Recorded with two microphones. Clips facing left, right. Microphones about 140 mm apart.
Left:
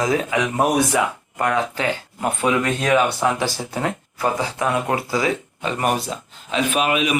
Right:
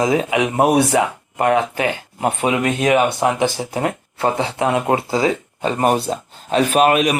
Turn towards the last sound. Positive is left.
turn(degrees=-45)  # may be behind; listen again after turning